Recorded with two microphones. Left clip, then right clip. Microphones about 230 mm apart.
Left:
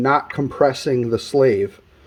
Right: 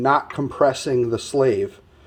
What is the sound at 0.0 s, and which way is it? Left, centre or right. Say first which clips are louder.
Speech: left 1 dB; left.